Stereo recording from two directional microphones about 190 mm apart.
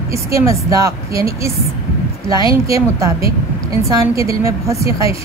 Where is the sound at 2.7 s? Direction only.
15° right (ahead or behind).